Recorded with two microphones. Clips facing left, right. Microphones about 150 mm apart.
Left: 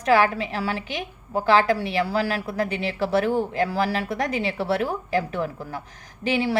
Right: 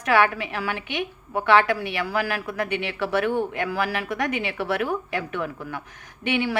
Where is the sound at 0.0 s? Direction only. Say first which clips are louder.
Left 1 dB; 30° left (ahead or behind).